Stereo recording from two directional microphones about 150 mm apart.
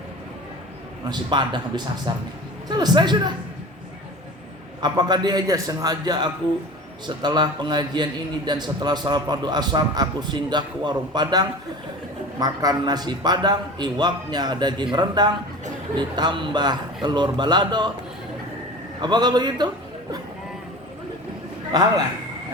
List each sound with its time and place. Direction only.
1.0 s a man's voice: 30° right (ahead or behind)
4.8 s a man's voice: 30° right (ahead or behind)
19.0 s a man's voice: 30° right (ahead or behind)
21.7 s a man's voice: 25° right (ahead or behind)